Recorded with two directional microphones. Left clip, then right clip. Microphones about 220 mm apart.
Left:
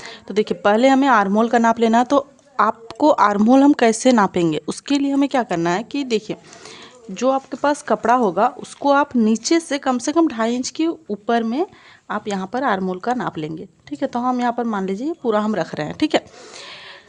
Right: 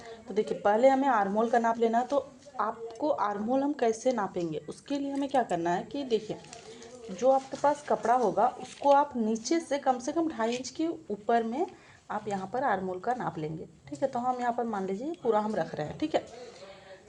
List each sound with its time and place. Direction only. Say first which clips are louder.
0.0 s speech: left 10 dB; 45° left (ahead or behind)